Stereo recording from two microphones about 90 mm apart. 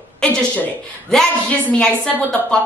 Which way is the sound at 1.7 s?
10° left (ahead or behind).